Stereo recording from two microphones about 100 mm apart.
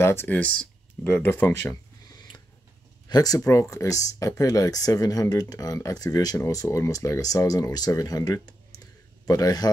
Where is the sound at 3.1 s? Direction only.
40° left (ahead or behind).